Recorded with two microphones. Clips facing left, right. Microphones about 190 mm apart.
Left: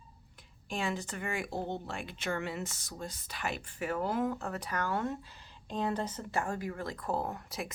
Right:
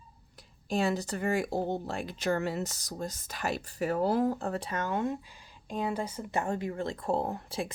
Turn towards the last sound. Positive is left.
turn(degrees=-30)  # may be behind; listen again after turning